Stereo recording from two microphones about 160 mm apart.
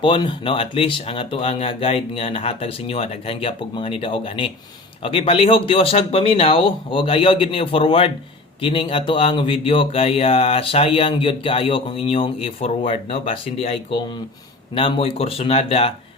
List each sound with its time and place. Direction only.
0.0 s speech: 30° left (ahead or behind)